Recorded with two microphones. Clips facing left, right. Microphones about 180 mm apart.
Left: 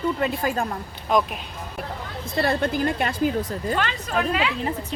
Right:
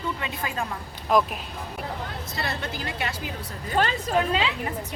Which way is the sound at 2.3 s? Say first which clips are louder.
Left 11 dB; 50° left (ahead or behind).